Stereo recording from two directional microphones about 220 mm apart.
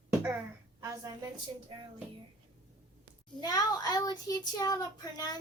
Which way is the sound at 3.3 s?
15° left (ahead or behind).